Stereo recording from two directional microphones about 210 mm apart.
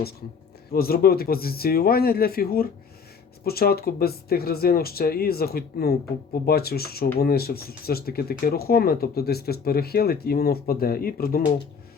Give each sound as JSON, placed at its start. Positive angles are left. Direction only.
{"t": 0.7, "sound": "speech", "side_deg": 45}